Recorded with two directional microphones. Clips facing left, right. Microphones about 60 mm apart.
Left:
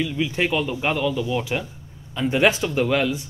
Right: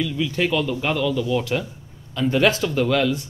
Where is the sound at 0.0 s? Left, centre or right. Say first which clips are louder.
Even; centre.